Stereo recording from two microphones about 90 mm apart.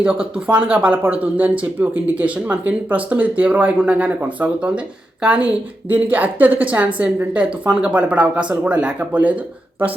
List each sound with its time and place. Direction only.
0.0 s speech: 15° right (ahead or behind)